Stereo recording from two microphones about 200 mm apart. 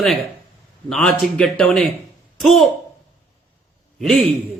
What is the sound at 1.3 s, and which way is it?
Speech, 5° left (ahead or behind).